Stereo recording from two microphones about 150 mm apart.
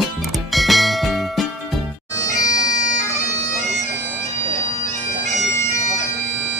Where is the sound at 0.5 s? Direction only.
Centre (ahead or behind).